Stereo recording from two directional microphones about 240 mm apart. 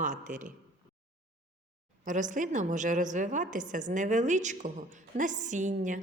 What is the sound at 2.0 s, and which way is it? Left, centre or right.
A woman's voice, right.